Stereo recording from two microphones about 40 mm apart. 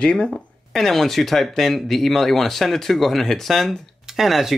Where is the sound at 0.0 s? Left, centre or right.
Left.